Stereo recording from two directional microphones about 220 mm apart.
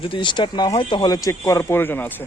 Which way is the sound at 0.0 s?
20° left (ahead or behind).